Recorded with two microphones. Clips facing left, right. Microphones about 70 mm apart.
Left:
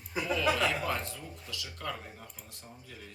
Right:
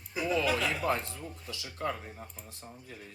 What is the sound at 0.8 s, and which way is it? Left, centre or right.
Speech, right.